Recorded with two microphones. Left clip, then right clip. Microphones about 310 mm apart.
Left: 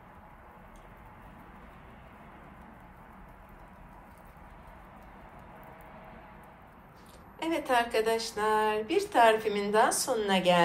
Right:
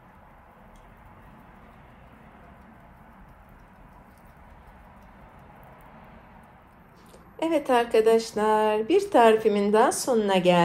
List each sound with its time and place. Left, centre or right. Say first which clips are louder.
7.3 s speech: right 5 dB; centre